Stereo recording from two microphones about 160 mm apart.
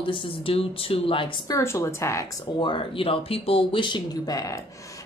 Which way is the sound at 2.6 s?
30° left (ahead or behind).